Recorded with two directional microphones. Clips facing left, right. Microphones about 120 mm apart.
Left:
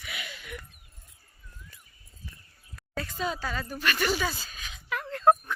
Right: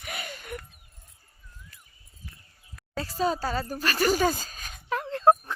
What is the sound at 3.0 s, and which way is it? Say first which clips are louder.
Speech: right 5 dB; 35° right (ahead or behind).